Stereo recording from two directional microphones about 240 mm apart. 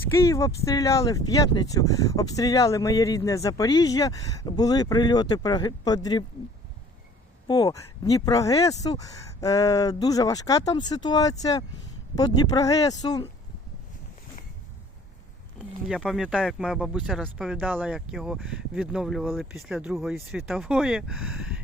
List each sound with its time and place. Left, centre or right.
0.1 s speech: centre
7.4 s speech: centre
15.9 s speech: centre